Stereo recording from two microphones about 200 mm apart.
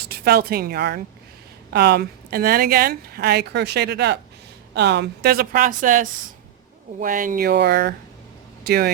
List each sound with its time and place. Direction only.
0.1 s a woman's voice: 50° right (ahead or behind)